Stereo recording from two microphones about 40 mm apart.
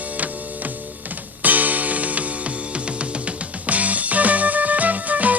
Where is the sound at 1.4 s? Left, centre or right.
Right.